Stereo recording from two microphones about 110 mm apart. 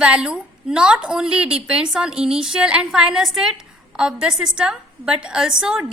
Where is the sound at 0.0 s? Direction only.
10° right (ahead or behind).